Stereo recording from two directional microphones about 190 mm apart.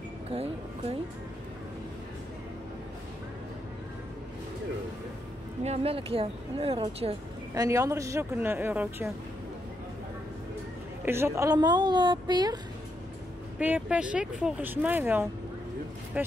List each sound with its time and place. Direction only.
0.3 s speech: 30° right (ahead or behind)
5.6 s speech: 30° right (ahead or behind)
7.5 s speech: 15° right (ahead or behind)
11.1 s a woman's voice: 15° right (ahead or behind)
13.6 s speech: 5° right (ahead or behind)